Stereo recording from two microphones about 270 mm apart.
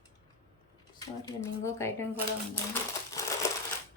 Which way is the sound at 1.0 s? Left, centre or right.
Centre.